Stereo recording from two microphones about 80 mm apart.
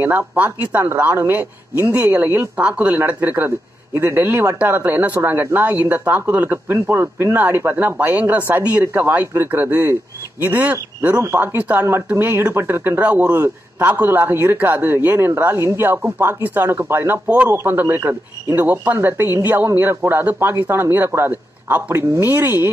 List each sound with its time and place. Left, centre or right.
0.0 s speech: right